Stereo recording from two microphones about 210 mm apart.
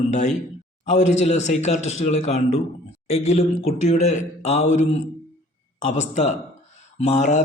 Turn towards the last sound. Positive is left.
turn(degrees=35)  # may be behind; listen again after turning